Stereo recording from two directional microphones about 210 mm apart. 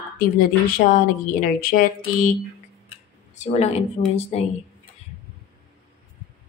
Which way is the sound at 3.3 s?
35° left (ahead or behind).